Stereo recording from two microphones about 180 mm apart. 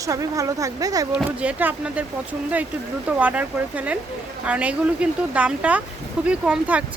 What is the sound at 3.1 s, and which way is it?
Speech, 10° right (ahead or behind).